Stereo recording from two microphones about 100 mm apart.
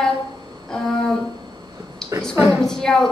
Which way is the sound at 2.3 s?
30° right (ahead or behind).